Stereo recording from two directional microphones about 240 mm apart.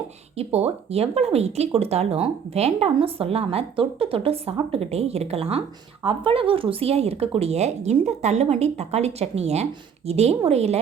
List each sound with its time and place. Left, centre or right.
0.3 s speech: right